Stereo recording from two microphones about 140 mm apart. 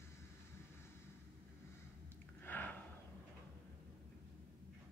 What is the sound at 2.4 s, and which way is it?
Gasp, 15° left (ahead or behind).